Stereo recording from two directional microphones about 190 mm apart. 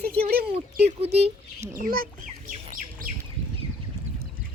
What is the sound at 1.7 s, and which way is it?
Bird, 50° right (ahead or behind).